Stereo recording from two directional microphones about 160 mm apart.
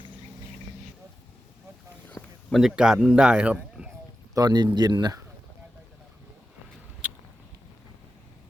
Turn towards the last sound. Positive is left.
turn(degrees=-10)  # may be behind; listen again after turning